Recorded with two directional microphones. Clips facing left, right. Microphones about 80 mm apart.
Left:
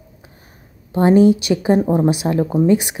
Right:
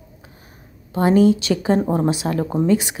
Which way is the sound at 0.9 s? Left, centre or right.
Left.